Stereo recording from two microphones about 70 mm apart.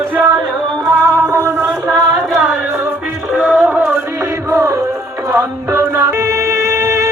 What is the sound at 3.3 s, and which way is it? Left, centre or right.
Music, centre.